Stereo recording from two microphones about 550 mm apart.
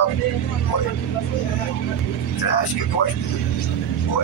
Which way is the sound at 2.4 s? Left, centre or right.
Left.